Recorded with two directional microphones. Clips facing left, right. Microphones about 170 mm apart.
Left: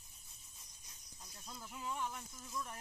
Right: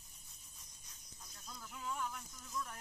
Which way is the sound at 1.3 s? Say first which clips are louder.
Left 2 dB; 20° left (ahead or behind).